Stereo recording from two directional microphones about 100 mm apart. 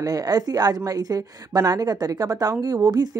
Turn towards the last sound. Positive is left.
turn(degrees=-40)  # may be behind; listen again after turning